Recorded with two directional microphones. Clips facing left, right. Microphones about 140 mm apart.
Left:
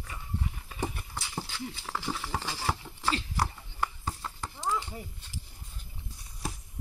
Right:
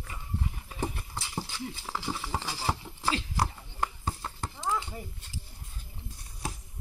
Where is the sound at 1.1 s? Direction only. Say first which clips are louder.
Right 1 dB; 10° right (ahead or behind).